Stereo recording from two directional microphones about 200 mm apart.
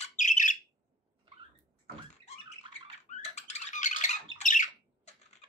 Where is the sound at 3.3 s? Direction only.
35° left (ahead or behind).